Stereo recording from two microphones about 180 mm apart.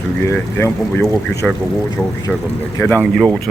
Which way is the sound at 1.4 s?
Centre (ahead or behind).